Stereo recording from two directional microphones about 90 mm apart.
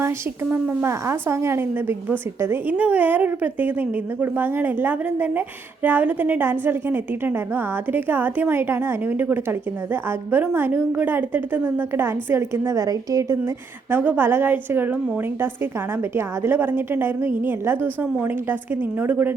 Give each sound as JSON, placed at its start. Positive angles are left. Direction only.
{"t": 0.5, "sound": "a woman's voice", "side_deg": -20}
{"t": 13.9, "sound": "a woman's voice", "side_deg": -20}